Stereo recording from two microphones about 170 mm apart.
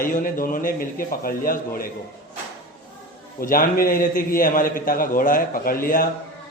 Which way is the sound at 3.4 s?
55° left (ahead or behind).